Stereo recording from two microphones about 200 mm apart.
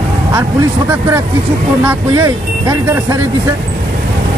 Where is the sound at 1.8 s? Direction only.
15° right (ahead or behind).